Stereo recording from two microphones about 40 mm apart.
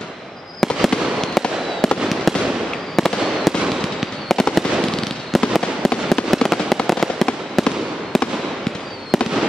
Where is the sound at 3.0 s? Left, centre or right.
Centre.